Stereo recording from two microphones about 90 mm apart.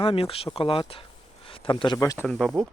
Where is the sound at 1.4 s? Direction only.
85° left; by 1.9 s 65° left (ahead or behind).